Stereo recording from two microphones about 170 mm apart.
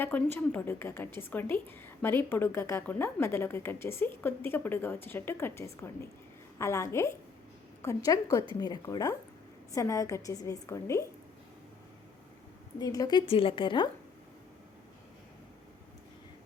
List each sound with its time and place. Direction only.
0.0 s a woman's voice: 10° left (ahead or behind)
12.8 s a woman's voice: 20° left (ahead or behind)